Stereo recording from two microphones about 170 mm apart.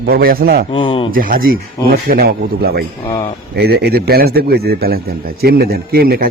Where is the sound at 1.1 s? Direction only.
55° right (ahead or behind).